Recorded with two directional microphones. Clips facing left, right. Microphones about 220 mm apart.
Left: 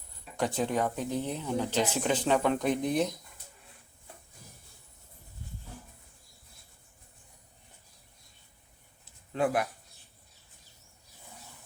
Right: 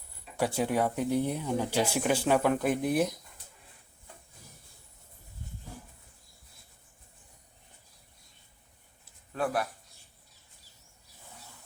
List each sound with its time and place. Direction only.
0.3 s speech: 10° right (ahead or behind)
9.3 s speech: 20° left (ahead or behind)